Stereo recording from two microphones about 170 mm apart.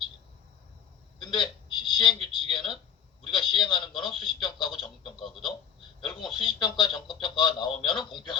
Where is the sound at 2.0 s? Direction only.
25° left (ahead or behind).